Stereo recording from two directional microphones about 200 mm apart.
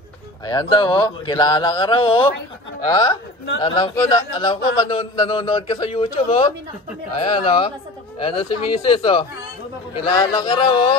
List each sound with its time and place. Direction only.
0.5 s a man's voice: 20° left (ahead or behind)